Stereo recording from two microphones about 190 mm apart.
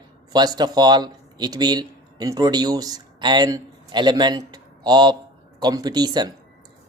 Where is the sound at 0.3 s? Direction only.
20° right (ahead or behind).